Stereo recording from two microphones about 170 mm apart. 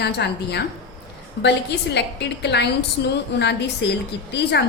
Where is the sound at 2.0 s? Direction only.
85° left.